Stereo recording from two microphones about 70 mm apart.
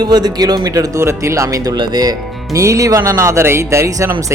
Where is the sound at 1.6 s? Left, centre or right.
Right.